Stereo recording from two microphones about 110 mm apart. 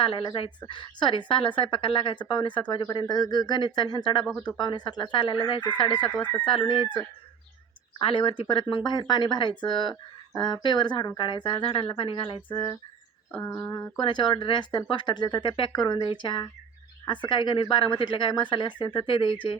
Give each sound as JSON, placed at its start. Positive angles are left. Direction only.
{"t": 0.0, "sound": "speech", "side_deg": 55}
{"t": 8.0, "sound": "speech", "side_deg": 55}
{"t": 14.0, "sound": "speech", "side_deg": 45}